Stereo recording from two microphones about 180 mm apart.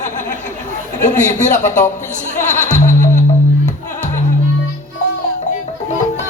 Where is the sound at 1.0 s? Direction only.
40° left (ahead or behind).